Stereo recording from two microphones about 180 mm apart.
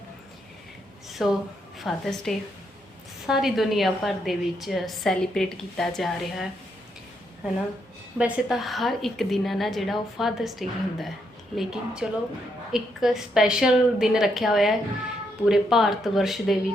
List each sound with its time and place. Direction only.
1.1 s a woman's voice: centre (ahead or behind)
8.2 s a woman's voice: centre (ahead or behind)